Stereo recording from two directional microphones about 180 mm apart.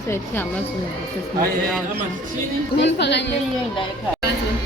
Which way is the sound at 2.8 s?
75° left (ahead or behind).